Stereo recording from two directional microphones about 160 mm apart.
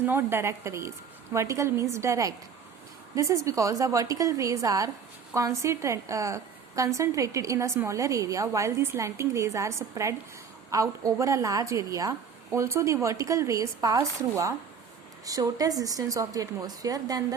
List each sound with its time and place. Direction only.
0.0 s a woman's voice: 15° right (ahead or behind)